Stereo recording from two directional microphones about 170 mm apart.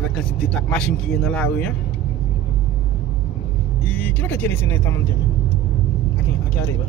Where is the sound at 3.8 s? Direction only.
10° left (ahead or behind).